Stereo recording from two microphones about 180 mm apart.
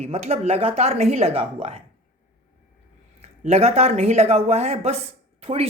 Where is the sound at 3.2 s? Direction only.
35° right (ahead or behind).